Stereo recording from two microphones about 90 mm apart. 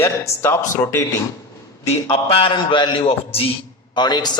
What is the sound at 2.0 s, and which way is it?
A man's voice, 90° left.